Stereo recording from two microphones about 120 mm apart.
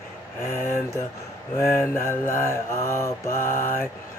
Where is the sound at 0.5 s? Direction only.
20° left (ahead or behind).